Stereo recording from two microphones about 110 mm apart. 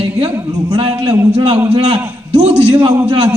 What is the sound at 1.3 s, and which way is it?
A man's voice, 80° right.